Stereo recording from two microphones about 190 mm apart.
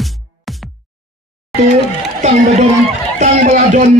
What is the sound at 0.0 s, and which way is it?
Music, centre (ahead or behind).